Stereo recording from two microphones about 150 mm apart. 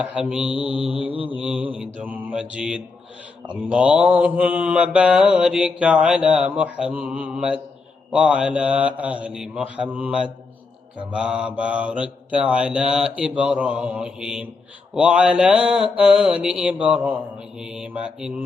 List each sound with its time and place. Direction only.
0.0 s mantra: 5° right (ahead or behind)
0.9 s mantra: 35° left (ahead or behind)
1.5 s mantra: 10° right (ahead or behind)